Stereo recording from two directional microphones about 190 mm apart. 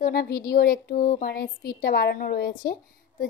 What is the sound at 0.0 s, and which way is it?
A woman's voice, 55° left (ahead or behind).